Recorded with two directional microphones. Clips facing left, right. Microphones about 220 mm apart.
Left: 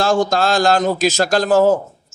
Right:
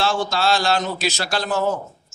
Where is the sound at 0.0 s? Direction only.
45° left (ahead or behind).